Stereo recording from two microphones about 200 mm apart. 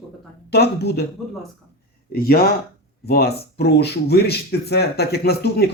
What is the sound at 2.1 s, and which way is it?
Speech, 50° left (ahead or behind).